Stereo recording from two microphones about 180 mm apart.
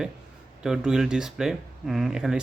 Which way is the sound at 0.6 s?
5° right (ahead or behind).